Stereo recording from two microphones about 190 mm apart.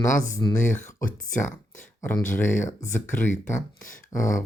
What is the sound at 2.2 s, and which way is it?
Speech, 40° left (ahead or behind).